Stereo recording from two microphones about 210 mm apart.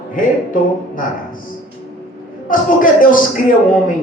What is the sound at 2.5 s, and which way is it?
Speech, 40° left (ahead or behind).